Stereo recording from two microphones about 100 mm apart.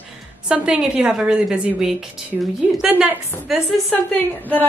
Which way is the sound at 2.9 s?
20° right (ahead or behind).